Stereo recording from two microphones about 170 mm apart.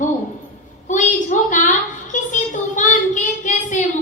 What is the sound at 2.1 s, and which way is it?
Child singing, 45° left (ahead or behind).